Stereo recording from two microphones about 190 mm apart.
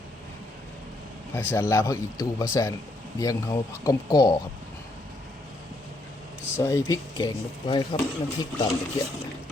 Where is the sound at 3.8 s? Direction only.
20° left (ahead or behind).